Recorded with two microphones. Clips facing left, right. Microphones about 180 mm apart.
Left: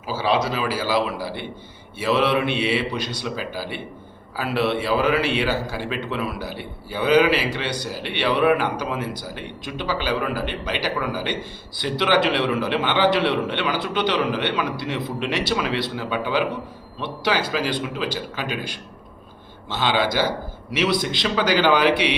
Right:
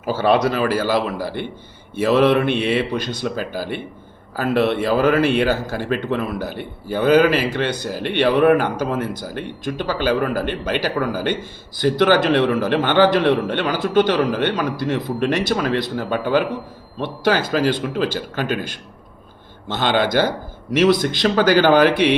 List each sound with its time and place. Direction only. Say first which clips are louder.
0.0 s a man's voice: right 5 dB; 55° right (ahead or behind)